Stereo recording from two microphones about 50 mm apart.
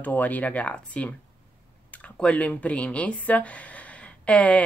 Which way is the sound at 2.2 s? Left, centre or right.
Left.